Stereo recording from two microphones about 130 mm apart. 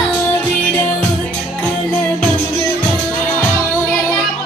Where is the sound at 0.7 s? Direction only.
10° left (ahead or behind).